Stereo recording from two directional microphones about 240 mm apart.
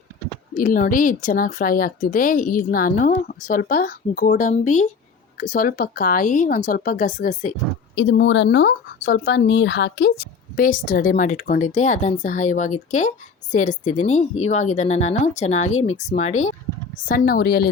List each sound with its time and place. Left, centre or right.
0.5 s speech: left
7.9 s speech: left